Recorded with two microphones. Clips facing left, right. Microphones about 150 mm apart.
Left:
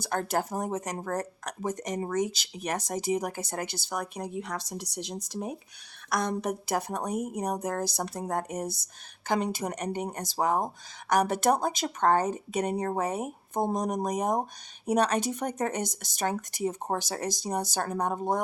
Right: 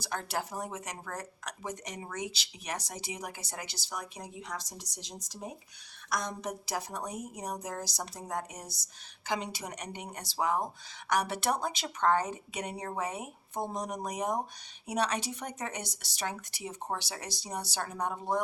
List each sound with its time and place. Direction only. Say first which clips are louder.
0.0 s a woman's voice: left 7 dB; 50° left (ahead or behind)